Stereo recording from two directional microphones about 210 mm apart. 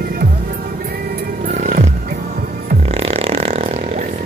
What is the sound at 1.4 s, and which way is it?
Music, 35° right (ahead or behind).